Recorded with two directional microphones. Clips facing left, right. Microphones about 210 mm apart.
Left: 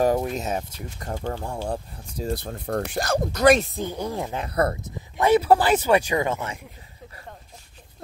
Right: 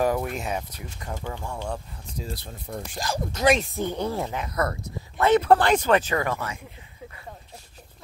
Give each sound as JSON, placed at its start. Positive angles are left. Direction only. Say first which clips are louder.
{"t": 0.0, "sound": "speech", "louder": "left 3 dB", "side_deg": 30}
{"t": 2.2, "sound": "speech", "louder": "left 12 dB", "side_deg": 55}
{"t": 3.7, "sound": "speech", "louder": "right 1 dB", "side_deg": 10}
{"t": 4.6, "sound": "speech", "louder": "left 5 dB", "side_deg": 30}
{"t": 5.2, "sound": "speech", "louder": "left 1 dB", "side_deg": 10}
{"t": 6.2, "sound": "speech", "louder": "left 2 dB", "side_deg": 25}